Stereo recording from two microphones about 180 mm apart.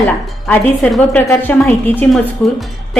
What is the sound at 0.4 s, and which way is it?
A woman's voice, 5° left (ahead or behind).